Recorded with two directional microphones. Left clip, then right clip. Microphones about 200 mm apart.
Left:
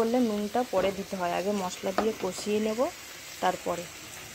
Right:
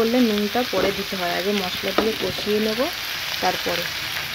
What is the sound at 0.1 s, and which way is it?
Frying, centre (ahead or behind).